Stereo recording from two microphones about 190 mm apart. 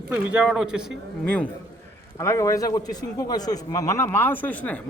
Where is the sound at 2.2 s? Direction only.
15° left (ahead or behind).